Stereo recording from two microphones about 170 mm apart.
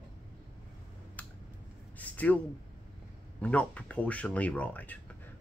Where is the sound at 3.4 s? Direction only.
5° left (ahead or behind).